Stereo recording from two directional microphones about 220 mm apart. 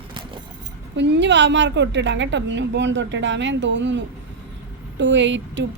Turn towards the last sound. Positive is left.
turn(degrees=-55)  # may be behind; listen again after turning